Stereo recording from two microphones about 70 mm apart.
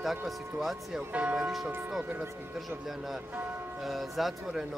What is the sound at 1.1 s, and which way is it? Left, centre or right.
Speech, right.